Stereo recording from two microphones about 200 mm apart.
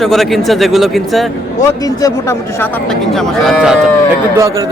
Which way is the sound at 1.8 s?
15° left (ahead or behind).